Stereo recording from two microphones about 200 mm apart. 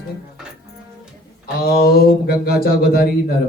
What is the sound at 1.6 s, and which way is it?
A man's voice, 50° left (ahead or behind).